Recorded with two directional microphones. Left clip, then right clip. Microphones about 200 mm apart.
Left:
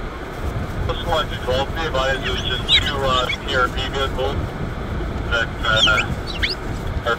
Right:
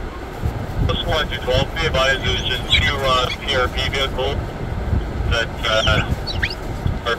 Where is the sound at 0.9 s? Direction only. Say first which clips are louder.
Right 1 dB; 20° right (ahead or behind).